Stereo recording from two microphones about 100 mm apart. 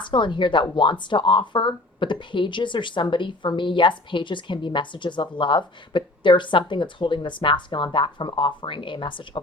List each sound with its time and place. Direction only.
0.0 s a woman's voice: 55° left (ahead or behind)